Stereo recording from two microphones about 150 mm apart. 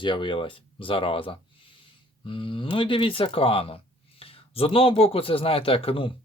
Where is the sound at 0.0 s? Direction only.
35° left (ahead or behind).